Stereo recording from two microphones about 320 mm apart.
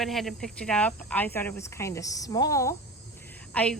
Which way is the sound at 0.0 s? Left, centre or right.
Centre.